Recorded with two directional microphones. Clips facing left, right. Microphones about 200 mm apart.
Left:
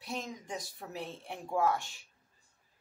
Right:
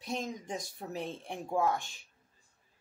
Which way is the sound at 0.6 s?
20° right (ahead or behind).